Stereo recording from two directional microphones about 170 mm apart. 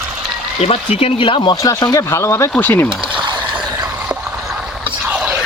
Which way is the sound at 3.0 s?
30° right (ahead or behind).